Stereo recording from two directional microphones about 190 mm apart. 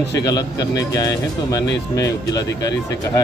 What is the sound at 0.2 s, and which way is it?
Speech, 20° left (ahead or behind).